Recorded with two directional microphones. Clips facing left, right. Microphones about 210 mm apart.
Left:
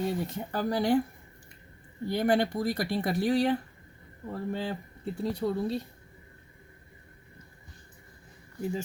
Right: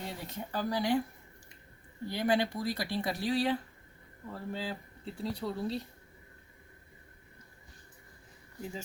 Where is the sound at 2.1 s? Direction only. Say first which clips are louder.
Left 4 dB; 50° left (ahead or behind).